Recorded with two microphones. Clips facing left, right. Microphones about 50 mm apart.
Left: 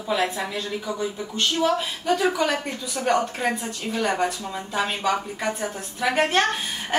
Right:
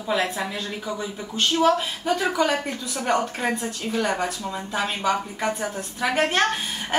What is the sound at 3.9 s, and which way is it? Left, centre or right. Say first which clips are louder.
A woman's voice: left 1 dB; centre.